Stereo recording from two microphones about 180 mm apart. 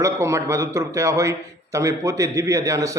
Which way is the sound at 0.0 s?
15° right (ahead or behind).